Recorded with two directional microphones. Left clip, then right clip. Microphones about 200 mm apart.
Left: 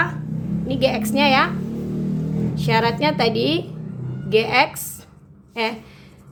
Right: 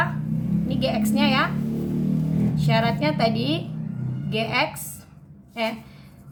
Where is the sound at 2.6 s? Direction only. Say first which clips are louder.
Left 5 dB; 40° left (ahead or behind).